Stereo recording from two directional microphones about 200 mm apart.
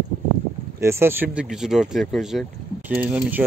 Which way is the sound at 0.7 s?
15° right (ahead or behind).